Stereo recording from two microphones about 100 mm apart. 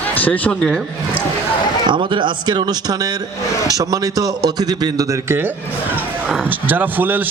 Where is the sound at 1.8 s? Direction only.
55° right (ahead or behind).